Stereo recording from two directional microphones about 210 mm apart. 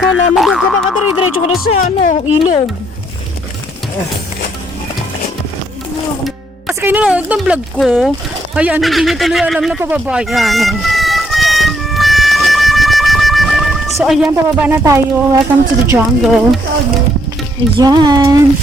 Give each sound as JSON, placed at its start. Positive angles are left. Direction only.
{"t": 0.0, "sound": "boing", "side_deg": 0}
{"t": 1.7, "sound": "speech", "side_deg": 35}
{"t": 6.2, "sound": "speech", "side_deg": -5}
{"t": 8.5, "sound": "a sound", "side_deg": -5}
{"t": 15.9, "sound": "boing", "side_deg": -5}
{"t": 17.7, "sound": "speech", "side_deg": -20}